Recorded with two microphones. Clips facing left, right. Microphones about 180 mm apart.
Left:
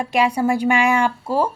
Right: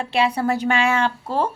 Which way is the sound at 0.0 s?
15° left (ahead or behind).